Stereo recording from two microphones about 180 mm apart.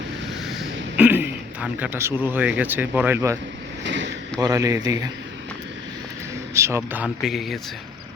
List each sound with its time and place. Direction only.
0.9 s speech: 10° right (ahead or behind)
3.8 s a sound: 85° right
4.4 s a man's voice: 20° right (ahead or behind)
6.5 s speech: 15° right (ahead or behind)